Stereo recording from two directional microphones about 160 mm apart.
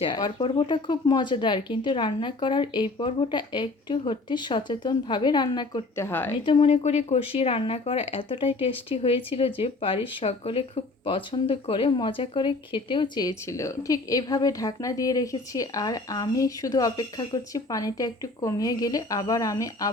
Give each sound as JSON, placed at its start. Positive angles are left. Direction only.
{"t": 0.0, "sound": "speech", "side_deg": 30}
{"t": 6.0, "sound": "a woman's voice", "side_deg": 15}
{"t": 6.4, "sound": "speech", "side_deg": 35}